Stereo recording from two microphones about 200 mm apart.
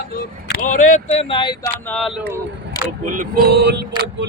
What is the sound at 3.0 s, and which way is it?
Speech, 40° right (ahead or behind).